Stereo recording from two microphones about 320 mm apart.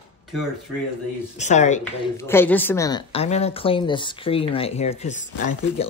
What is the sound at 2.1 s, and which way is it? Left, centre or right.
A woman's voice, centre.